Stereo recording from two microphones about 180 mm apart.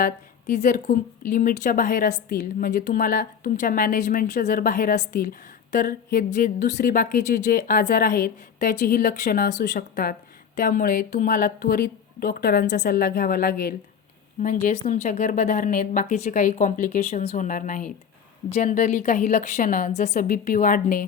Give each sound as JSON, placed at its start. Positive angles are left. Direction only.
{"t": 0.0, "sound": "a woman's voice", "side_deg": 45}